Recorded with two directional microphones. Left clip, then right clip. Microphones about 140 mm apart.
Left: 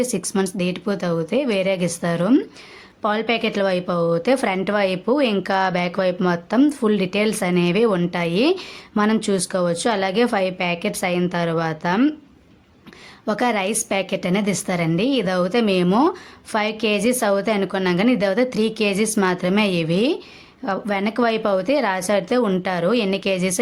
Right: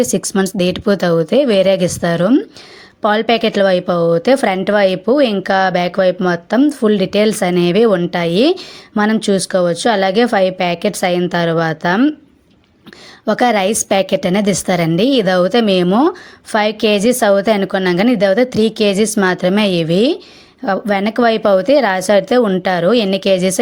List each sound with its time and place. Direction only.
0.0 s a woman's voice: 40° right (ahead or behind)
13.2 s a woman's voice: 35° right (ahead or behind)